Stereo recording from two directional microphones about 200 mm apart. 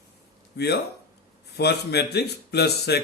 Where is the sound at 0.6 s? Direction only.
55° left (ahead or behind).